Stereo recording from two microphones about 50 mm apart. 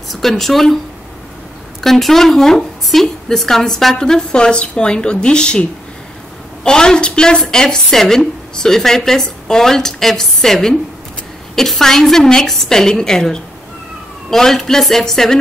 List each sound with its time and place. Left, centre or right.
0.1 s speech: centre
1.8 s a woman's voice: centre